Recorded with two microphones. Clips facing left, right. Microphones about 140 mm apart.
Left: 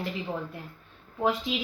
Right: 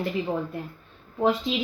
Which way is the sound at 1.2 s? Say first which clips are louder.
Right 4 dB; 30° right (ahead or behind).